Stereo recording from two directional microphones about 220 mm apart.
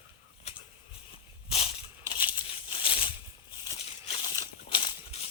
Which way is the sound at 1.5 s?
25° left (ahead or behind).